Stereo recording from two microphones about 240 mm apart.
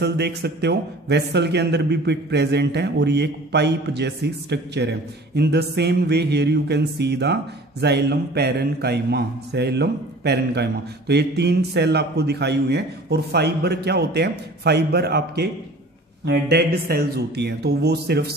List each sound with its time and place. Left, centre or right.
0.0 s a man's voice: right